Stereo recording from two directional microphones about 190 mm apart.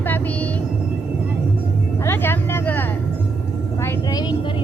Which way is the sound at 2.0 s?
10° left (ahead or behind).